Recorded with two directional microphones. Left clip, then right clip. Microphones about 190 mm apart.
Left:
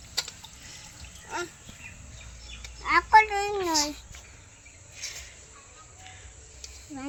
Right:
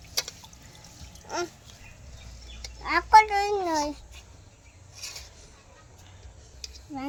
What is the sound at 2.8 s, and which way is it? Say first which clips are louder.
Speech: right 1 dB; 30° right (ahead or behind).